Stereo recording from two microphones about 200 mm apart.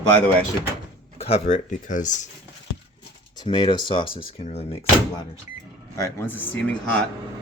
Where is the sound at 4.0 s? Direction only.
45° left (ahead or behind).